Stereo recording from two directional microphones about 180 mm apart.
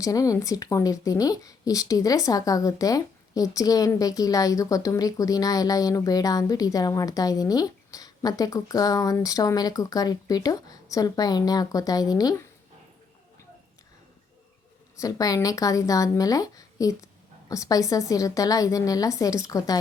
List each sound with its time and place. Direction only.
0.0 s speech: 20° left (ahead or behind)
14.9 s speech: 20° left (ahead or behind)